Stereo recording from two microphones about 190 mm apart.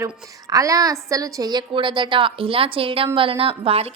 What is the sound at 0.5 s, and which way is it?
A woman's voice, 20° right (ahead or behind).